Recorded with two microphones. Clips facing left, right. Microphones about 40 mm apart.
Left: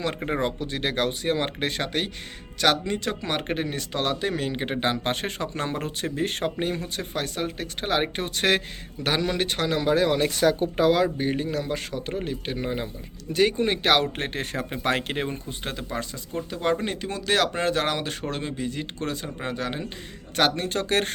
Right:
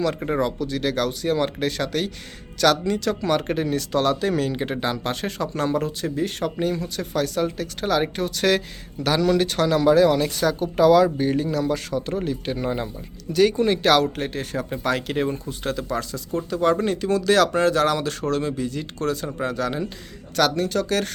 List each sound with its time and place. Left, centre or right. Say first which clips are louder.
0.3 s speech: right 3 dB; left
4.9 s speech: even; left; by 12.9 s centre
13.3 s speech: right 4 dB; left
14.2 s speech: right 2 dB; left
15.1 s speech: right 5 dB; left